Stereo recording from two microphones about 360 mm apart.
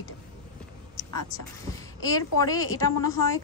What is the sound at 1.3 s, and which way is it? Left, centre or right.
A woman's voice, centre.